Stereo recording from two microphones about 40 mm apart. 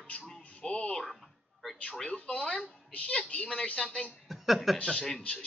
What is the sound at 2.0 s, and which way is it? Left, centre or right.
A woman's voice, left.